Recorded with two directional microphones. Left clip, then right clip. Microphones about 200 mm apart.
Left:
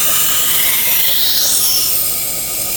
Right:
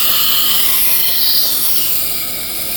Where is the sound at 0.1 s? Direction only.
5° left (ahead or behind).